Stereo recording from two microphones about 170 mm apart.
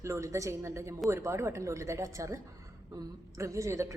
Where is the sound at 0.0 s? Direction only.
20° right (ahead or behind).